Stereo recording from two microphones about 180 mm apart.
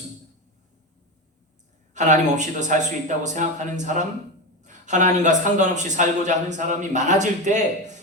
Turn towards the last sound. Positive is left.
turn(degrees=-40)  # may be behind; listen again after turning